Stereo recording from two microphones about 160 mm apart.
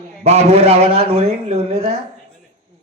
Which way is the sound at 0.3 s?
40° right (ahead or behind).